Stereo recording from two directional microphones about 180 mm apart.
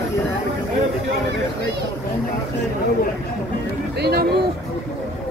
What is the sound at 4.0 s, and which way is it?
Speech, 65° right (ahead or behind).